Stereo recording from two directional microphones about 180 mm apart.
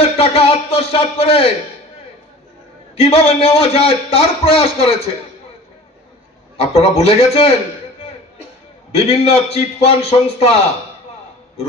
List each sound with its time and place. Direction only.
0.2 s speech: 35° left (ahead or behind)
3.0 s a man's voice: 35° left (ahead or behind)
6.5 s a man's voice: 35° left (ahead or behind)
8.9 s a man's voice: 35° left (ahead or behind)